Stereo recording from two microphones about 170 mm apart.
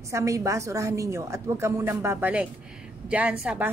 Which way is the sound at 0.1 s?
20° right (ahead or behind).